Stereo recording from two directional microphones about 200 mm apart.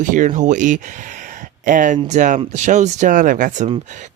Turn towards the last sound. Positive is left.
turn(degrees=-35)  # may be behind; listen again after turning